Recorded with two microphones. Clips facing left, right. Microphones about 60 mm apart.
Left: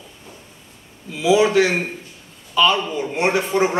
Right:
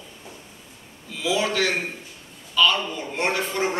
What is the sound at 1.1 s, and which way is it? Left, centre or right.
Speech, centre.